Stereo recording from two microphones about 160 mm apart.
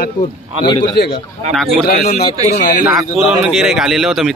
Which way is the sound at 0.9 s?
90° left.